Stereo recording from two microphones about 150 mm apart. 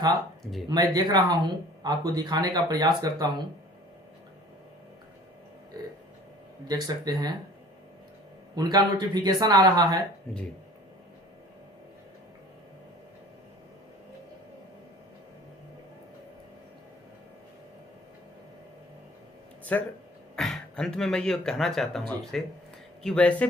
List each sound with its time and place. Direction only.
0.7 s speech: 25° right (ahead or behind)
6.7 s speech: 25° right (ahead or behind)
8.5 s speech: 25° right (ahead or behind)
19.7 s speech: 10° left (ahead or behind)